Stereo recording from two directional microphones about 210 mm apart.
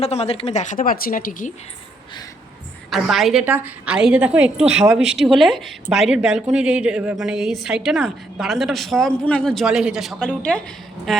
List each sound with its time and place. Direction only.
0.0 s a woman's voice: 30° left (ahead or behind)
2.9 s speech: centre (ahead or behind)